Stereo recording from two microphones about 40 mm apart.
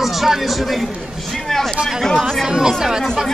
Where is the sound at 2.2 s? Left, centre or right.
Centre.